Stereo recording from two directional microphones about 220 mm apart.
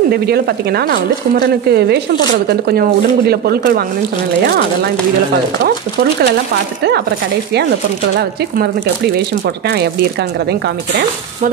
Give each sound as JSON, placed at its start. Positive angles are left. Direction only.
{"t": 0.1, "sound": "speech", "side_deg": -45}